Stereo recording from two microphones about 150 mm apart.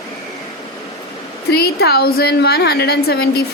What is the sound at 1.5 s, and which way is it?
Speech, 90° left.